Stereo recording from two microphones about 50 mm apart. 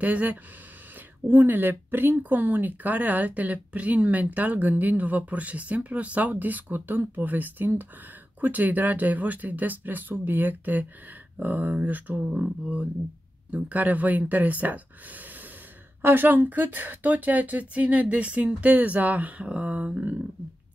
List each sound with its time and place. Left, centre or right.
0.0 s speech: right
1.2 s speech: right